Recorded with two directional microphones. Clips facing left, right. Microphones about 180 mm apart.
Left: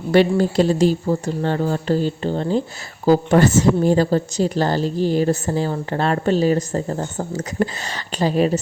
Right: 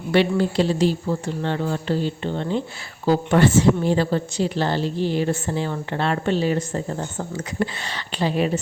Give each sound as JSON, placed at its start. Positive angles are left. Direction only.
{"t": 0.1, "sound": "a woman's voice", "side_deg": 40}